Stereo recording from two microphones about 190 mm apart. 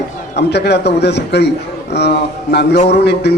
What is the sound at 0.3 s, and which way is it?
A man's voice, 60° left (ahead or behind).